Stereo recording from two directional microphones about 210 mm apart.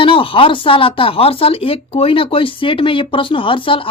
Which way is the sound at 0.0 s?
25° left (ahead or behind).